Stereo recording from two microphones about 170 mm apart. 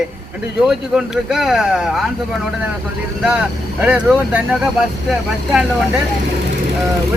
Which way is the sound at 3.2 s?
10° right (ahead or behind).